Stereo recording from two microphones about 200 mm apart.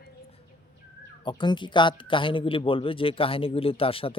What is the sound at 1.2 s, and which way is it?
Speech, 20° left (ahead or behind).